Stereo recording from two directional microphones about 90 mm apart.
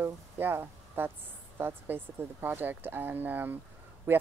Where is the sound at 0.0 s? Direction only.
25° right (ahead or behind).